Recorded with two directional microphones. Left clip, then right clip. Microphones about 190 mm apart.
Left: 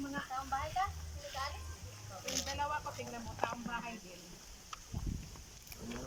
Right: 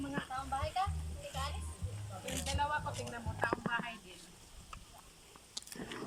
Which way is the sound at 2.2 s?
10° right (ahead or behind).